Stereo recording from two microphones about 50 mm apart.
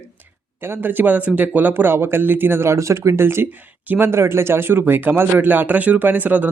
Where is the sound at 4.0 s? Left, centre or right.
Right.